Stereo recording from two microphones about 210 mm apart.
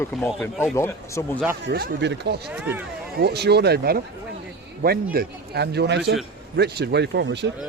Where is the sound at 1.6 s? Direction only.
50° right (ahead or behind).